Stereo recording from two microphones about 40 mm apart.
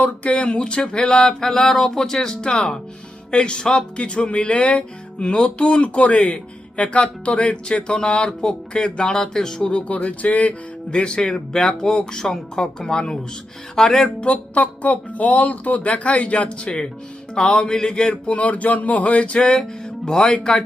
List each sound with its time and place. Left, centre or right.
0.0 s speech: left; by 9.7 s centre
9.8 s speech: left
10.9 s speech: left
14.2 s speech: left
17.3 s speech: left
18.1 s speech: left
19.5 s speech: centre